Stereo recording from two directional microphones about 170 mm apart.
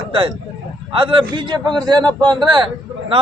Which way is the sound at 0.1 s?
30° right (ahead or behind).